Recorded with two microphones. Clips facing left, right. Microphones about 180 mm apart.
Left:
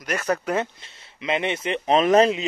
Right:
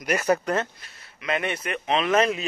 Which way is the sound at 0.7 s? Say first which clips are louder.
Left 5 dB; 25° left (ahead or behind).